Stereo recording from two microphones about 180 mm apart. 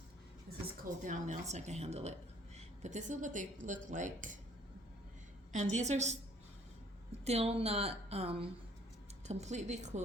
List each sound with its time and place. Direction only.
1.0 s a woman's voice: 45° right (ahead or behind)
5.5 s a woman's voice: 40° right (ahead or behind)
7.3 s a woman's voice: 35° right (ahead or behind)